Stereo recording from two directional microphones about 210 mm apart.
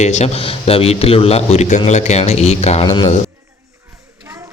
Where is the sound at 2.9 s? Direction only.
20° left (ahead or behind).